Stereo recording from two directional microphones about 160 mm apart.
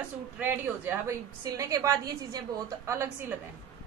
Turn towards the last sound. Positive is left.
turn(degrees=-15)  # may be behind; listen again after turning